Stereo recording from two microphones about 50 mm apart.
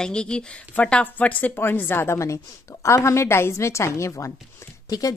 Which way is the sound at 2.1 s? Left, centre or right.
Left.